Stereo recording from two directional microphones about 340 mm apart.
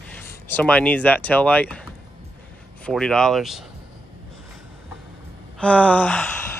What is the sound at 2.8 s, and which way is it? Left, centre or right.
Speech, centre.